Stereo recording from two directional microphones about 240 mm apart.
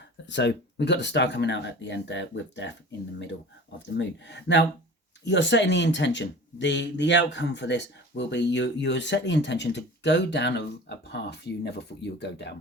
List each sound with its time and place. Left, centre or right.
0.3 s speech: left
3.8 s speech: left